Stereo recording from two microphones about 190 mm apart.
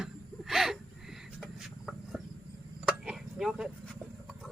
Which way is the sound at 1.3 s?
Centre (ahead or behind).